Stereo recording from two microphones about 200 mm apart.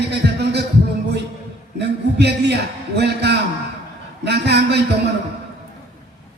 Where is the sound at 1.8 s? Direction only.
55° right (ahead or behind).